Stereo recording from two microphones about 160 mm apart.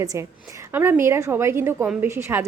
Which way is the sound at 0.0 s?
20° right (ahead or behind).